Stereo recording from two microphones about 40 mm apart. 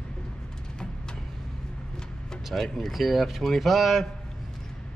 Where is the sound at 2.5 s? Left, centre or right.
Centre.